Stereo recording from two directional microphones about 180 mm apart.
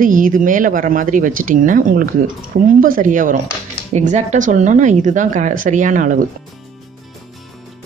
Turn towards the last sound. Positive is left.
turn(degrees=-45)  # may be behind; listen again after turning